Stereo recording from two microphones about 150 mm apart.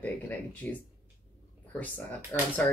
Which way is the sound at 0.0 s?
10° left (ahead or behind).